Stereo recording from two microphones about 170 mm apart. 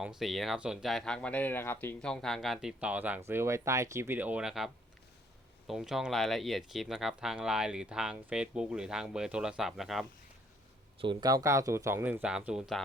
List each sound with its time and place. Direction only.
0.0 s speech: centre (ahead or behind)
11.0 s speech: 25° right (ahead or behind); by 12.8 s 5° right (ahead or behind)